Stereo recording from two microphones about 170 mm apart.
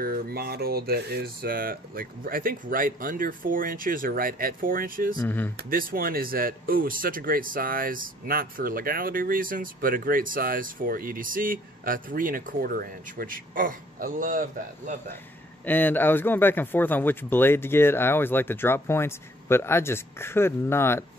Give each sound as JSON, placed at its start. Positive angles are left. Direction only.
{"t": 0.0, "sound": "speech", "side_deg": -65}
{"t": 5.2, "sound": "a man's voice", "side_deg": 10}
{"t": 5.7, "sound": "speech", "side_deg": -55}
{"t": 15.6, "sound": "a man's voice", "side_deg": 10}